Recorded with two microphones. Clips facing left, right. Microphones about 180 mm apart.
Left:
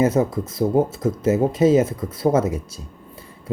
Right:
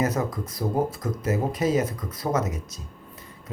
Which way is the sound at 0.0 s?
25° left (ahead or behind).